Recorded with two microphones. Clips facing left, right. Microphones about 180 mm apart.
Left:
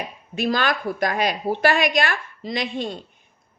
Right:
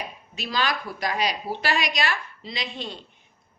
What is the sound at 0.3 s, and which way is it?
A woman's voice, 50° left (ahead or behind).